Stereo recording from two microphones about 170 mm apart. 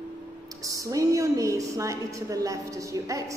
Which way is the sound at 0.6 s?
20° right (ahead or behind).